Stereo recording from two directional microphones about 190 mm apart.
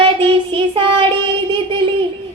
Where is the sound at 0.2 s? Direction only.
25° right (ahead or behind).